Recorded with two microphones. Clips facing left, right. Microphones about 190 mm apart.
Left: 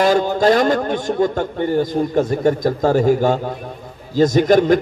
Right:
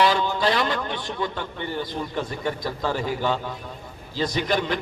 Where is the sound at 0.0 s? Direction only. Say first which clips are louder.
Left 7 dB; 45° left (ahead or behind).